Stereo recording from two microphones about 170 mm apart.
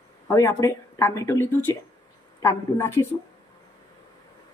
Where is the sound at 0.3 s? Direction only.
15° left (ahead or behind).